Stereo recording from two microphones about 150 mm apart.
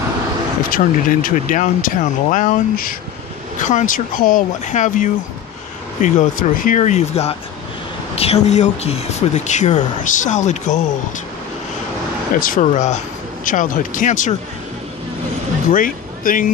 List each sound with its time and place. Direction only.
0.7 s speech: 65° left (ahead or behind)
3.5 s speech: 55° left (ahead or behind)
12.4 s speech: 65° left (ahead or behind)
15.7 s speech: 65° left (ahead or behind)